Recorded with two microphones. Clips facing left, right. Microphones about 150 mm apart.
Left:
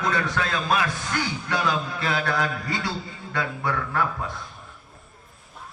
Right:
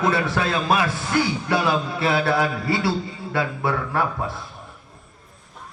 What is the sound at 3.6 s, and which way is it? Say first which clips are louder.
Speech: right 1 dB; 30° right (ahead or behind).